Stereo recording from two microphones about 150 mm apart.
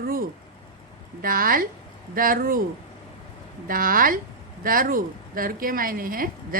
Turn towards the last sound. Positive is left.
turn(degrees=-70)  # may be behind; listen again after turning